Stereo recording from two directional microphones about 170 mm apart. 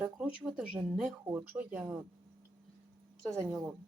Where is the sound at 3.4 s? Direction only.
Centre (ahead or behind).